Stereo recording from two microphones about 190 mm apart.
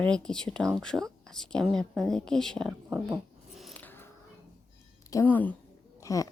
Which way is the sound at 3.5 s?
5° left (ahead or behind).